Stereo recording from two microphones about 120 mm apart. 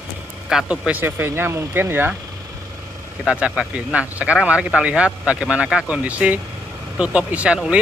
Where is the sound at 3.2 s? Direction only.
5° right (ahead or behind).